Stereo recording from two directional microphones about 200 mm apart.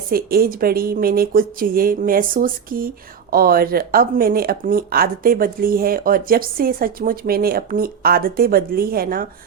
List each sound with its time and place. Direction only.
0.1 s speech: 50° right (ahead or behind)